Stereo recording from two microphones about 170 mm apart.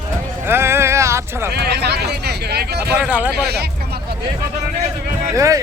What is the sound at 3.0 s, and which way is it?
Speech, 10° right (ahead or behind).